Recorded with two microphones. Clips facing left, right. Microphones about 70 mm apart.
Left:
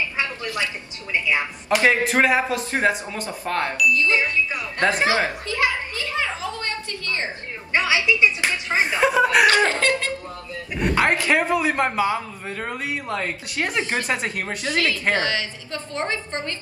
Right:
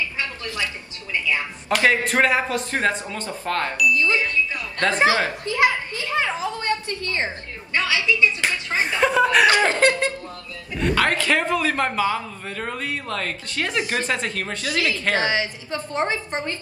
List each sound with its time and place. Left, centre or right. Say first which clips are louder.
0.2 s a sound: left 2 dB; left
1.1 s a man's voice: left 2 dB; left
5.5 s a sound: right 3 dB; right
7.7 s speech: left 2 dB; left
9.0 s a man's voice: even; centre
9.5 s a woman's voice: right 1 dB; right
10.8 s a man's voice: even; left
15.1 s a woman's voice: right 2 dB; right